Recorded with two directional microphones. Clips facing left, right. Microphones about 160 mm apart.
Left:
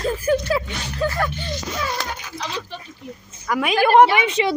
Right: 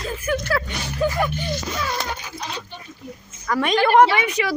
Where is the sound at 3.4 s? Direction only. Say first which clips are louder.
Even; 10° left (ahead or behind).